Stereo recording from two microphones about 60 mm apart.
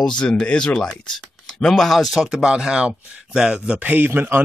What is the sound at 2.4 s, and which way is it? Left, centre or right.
Speech, centre.